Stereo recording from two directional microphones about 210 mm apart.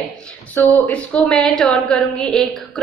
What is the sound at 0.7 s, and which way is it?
A woman's voice, 5° left (ahead or behind).